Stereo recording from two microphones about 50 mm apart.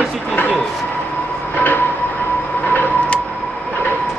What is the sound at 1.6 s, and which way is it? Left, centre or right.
Train, left.